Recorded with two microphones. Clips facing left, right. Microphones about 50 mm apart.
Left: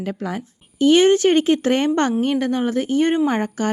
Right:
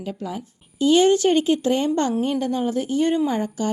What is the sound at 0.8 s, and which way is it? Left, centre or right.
A woman's voice, left.